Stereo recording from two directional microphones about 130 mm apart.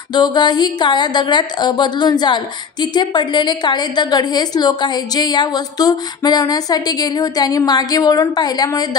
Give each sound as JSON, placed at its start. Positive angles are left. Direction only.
{"t": 0.1, "sound": "a woman's voice", "side_deg": 35}